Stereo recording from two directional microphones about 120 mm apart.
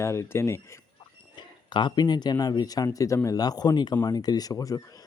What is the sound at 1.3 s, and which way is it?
Speech, 40° left (ahead or behind).